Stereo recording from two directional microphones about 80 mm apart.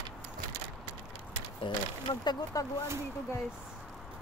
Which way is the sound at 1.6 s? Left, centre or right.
Left.